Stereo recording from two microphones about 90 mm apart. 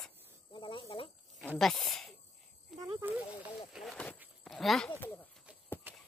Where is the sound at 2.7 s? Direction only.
5° right (ahead or behind).